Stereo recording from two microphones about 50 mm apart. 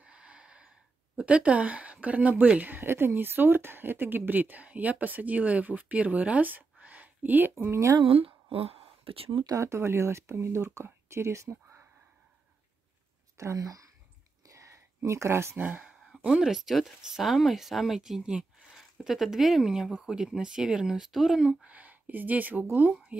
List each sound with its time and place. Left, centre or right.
0.0 s gasp: right
1.1 s speech: right
2.9 s speech: right
7.6 s speech: right
9.6 s speech: right
13.4 s speech: right
14.5 s a sound: right
15.0 s speech: right
15.5 s speech: right
16.3 s speech: centre
21.6 s speech: right